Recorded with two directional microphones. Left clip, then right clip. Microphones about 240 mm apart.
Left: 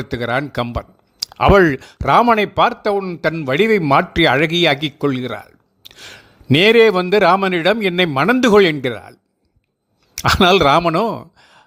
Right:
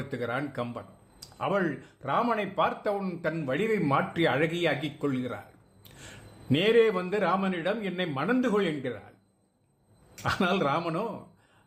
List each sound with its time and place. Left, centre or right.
0.0 s speech: left
5.8 s a sound: left
6.5 s speech: left
10.2 s speech: left